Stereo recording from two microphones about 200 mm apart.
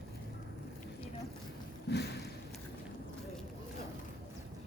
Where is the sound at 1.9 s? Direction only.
60° left (ahead or behind).